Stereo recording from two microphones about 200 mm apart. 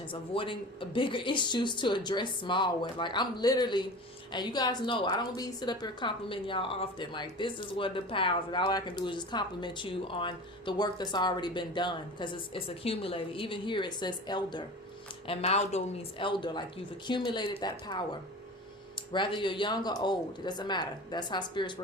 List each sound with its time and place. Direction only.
0.1 s a woman's voice: 25° left (ahead or behind)